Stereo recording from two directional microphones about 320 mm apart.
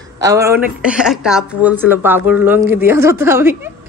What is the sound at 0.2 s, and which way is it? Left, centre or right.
Speech, centre.